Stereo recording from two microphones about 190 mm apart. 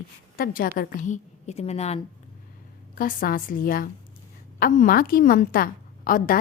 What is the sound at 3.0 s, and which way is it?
A woman's voice, 50° left (ahead or behind).